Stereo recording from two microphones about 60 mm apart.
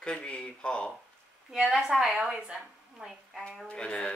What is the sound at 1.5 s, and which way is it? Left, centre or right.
A woman's voice, centre.